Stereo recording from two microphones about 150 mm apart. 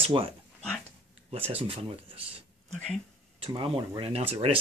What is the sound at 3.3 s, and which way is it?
Speech, 40° right (ahead or behind).